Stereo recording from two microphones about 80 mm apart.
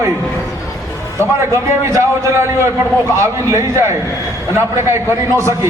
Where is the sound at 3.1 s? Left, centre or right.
Right.